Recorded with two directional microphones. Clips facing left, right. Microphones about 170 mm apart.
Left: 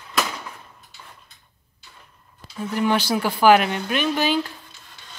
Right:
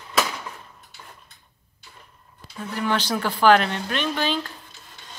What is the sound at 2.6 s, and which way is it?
Speech, 15° left (ahead or behind).